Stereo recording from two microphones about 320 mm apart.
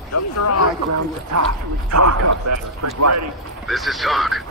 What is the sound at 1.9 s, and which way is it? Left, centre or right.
A man's voice, right.